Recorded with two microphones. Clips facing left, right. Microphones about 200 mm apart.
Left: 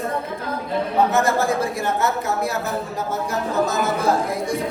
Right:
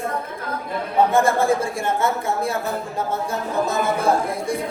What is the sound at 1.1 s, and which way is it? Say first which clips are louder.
Speech: right 2 dB; 30° right (ahead or behind).